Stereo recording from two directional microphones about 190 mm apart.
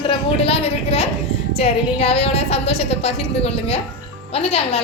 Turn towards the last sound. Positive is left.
turn(degrees=30)  # may be behind; listen again after turning